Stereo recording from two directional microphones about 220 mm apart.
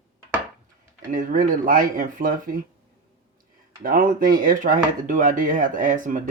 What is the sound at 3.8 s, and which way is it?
Speech, 40° right (ahead or behind).